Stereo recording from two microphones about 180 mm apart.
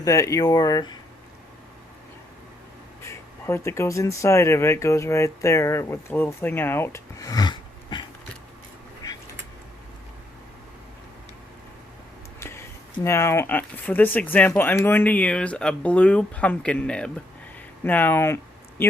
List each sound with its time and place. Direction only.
0.0 s speech: 15° left (ahead or behind)
3.0 s speech: 15° left (ahead or behind)
12.4 s speech: 15° left (ahead or behind)